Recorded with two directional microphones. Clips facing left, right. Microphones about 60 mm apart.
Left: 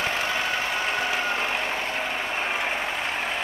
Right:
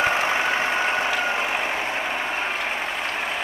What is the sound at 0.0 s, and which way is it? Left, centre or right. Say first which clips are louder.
Vehicle: right 5 dB; right.